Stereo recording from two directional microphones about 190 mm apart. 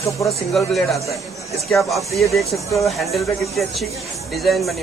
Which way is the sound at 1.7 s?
Centre (ahead or behind).